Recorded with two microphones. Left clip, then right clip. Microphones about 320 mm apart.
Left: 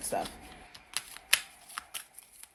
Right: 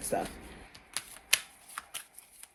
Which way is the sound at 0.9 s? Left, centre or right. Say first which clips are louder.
Left 2 dB; centre.